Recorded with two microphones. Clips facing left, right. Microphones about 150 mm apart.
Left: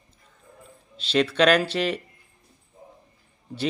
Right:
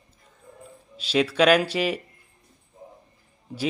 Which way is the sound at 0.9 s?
10° right (ahead or behind).